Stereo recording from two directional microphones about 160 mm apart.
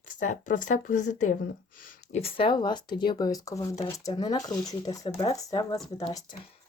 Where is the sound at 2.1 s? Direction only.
35° left (ahead or behind).